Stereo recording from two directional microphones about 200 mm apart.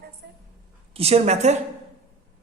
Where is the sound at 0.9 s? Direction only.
30° right (ahead or behind).